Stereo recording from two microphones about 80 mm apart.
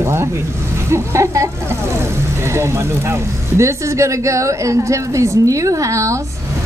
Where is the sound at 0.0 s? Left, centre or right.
Right.